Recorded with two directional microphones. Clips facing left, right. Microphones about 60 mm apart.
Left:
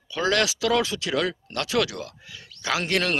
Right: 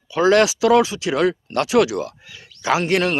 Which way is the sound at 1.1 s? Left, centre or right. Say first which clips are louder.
Right 8 dB; right.